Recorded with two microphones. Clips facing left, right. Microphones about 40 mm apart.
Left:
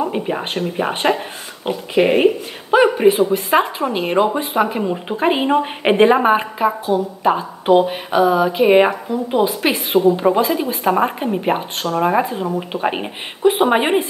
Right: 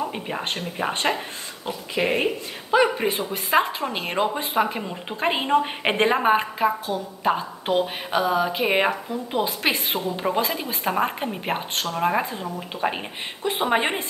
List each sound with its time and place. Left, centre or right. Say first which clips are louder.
0.1 s speech: left 7 dB; centre
1.6 s speech: left 9 dB; left
2.0 s speech: left 9 dB; left; by 12.4 s centre
12.8 s speech: left 5 dB; centre